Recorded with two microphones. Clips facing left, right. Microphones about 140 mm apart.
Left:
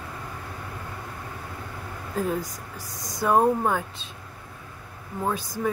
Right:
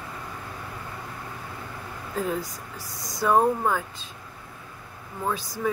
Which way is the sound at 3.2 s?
10° left (ahead or behind).